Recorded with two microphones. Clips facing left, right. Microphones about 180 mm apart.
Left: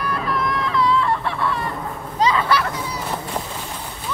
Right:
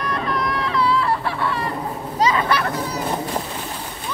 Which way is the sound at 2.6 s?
40° right (ahead or behind).